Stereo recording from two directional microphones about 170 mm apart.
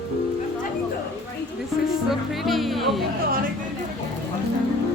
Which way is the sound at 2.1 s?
Centre (ahead or behind).